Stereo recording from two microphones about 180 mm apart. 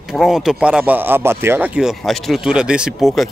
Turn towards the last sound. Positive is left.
turn(degrees=0)  # may be behind; listen again after turning